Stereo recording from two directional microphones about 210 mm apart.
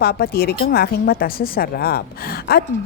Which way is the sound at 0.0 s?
50° left (ahead or behind).